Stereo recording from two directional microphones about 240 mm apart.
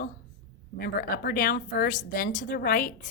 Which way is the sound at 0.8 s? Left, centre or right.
Left.